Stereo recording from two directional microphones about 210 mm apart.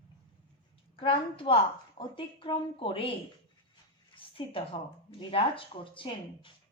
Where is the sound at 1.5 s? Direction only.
25° left (ahead or behind).